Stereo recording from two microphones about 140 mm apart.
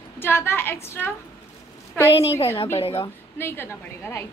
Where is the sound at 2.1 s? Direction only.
45° left (ahead or behind).